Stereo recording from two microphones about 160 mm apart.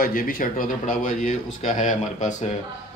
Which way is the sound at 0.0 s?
65° left (ahead or behind).